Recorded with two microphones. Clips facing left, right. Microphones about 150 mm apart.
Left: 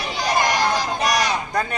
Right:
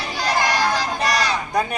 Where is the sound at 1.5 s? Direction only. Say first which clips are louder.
Right 2 dB; 15° right (ahead or behind).